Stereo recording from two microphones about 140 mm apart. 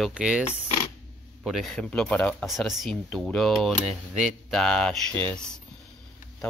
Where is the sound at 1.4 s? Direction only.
Centre (ahead or behind).